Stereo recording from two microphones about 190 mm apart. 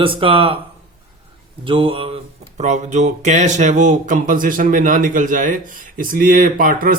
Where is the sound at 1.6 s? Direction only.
30° right (ahead or behind).